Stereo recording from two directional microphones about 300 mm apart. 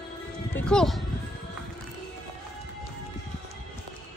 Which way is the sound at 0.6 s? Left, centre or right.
Centre.